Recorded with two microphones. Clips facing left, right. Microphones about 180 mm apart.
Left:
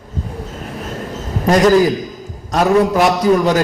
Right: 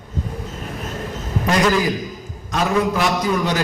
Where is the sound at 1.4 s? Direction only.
40° left (ahead or behind).